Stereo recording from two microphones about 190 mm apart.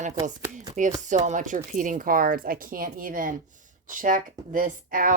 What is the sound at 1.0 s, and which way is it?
A woman's voice, 40° right (ahead or behind).